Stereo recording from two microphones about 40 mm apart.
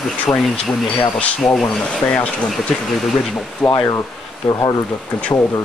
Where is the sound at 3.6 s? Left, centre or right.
Centre.